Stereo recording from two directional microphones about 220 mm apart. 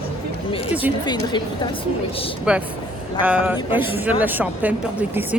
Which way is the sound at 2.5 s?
5° right (ahead or behind).